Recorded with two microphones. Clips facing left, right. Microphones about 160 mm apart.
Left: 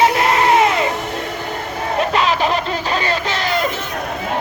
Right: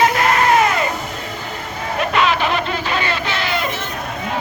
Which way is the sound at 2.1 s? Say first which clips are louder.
Right 2 dB; 35° left (ahead or behind).